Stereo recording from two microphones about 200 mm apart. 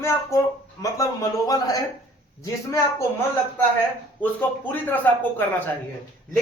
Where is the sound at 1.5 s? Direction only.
20° left (ahead or behind).